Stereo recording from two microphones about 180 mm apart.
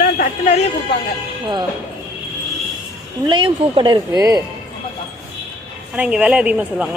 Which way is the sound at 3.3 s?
30° right (ahead or behind).